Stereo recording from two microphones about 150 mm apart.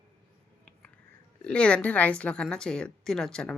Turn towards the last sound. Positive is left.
turn(degrees=5)  # may be behind; listen again after turning